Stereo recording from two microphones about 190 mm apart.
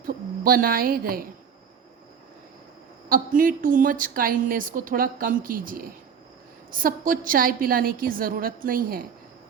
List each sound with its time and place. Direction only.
0.0 s a woman's voice: 50° right (ahead or behind)
3.1 s a woman's voice: 45° right (ahead or behind)